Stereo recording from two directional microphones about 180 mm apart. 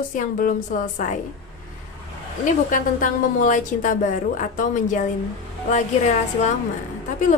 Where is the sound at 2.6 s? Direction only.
50° left (ahead or behind).